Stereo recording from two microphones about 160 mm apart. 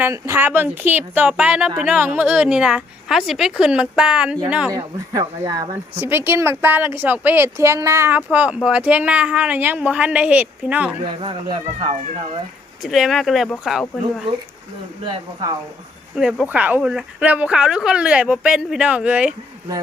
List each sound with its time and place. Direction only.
0.0 s speech: 15° right (ahead or behind)
4.7 s speech: 20° right (ahead or behind)
6.0 s speech: 15° right (ahead or behind)
11.0 s speech: 35° right (ahead or behind)
12.8 s speech: centre (ahead or behind)
15.1 s speech: 20° right (ahead or behind)
16.1 s speech: 5° right (ahead or behind)